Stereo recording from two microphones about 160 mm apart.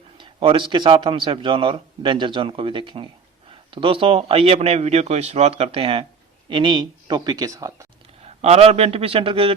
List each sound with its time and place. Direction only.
0.2 s speech: 30° right (ahead or behind)
8.2 s speech: 40° right (ahead or behind)